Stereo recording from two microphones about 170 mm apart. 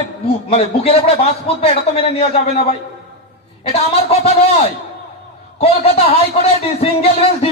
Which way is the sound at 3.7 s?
35° left (ahead or behind).